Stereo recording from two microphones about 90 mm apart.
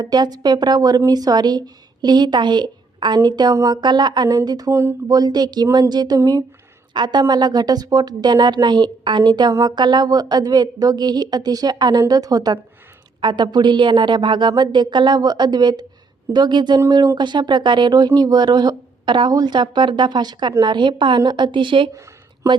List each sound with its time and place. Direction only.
0.0 s speech: 50° right (ahead or behind)
4.7 s speech: 30° right (ahead or behind)
5.0 s speech: 45° right (ahead or behind)
13.2 s a woman's voice: 55° right (ahead or behind)